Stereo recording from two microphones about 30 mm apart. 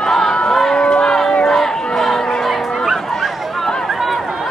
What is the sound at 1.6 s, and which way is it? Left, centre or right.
Chatter, centre.